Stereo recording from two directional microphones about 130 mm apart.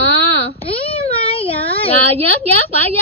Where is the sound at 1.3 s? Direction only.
50° left (ahead or behind).